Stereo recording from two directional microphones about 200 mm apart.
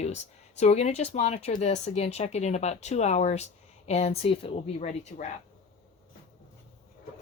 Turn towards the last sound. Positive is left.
turn(degrees=35)  # may be behind; listen again after turning